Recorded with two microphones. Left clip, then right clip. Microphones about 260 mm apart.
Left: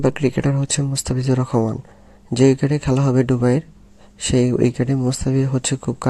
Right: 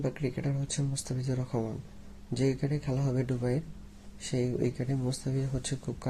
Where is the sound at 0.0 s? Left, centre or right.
Left.